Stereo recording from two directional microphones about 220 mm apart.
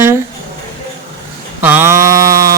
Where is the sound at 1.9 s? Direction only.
40° right (ahead or behind).